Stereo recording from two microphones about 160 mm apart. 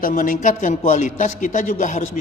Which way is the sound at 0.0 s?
55° left (ahead or behind).